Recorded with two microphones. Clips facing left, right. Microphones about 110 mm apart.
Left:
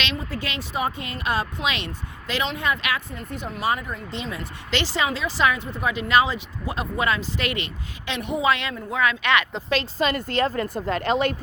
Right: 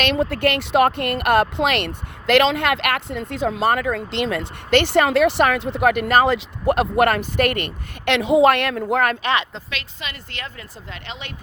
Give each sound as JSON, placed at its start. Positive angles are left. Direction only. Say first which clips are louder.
{"t": 0.0, "sound": "speech", "louder": "right 10 dB", "side_deg": -60}
{"t": 6.3, "sound": "speech", "louder": "right 11 dB", "side_deg": -70}
{"t": 8.1, "sound": "speech", "louder": "right 8 dB", "side_deg": -85}
{"t": 9.2, "sound": "speech", "louder": "even", "side_deg": -35}
{"t": 9.6, "sound": "speech", "louder": "left 10 dB", "side_deg": 35}